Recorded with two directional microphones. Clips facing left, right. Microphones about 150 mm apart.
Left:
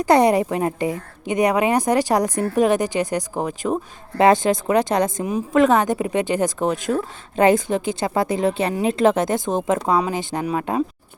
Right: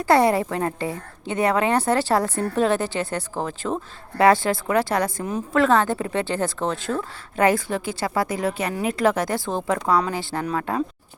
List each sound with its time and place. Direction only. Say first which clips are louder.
0.0 s a woman's voice: left 3 dB; 20° left (ahead or behind)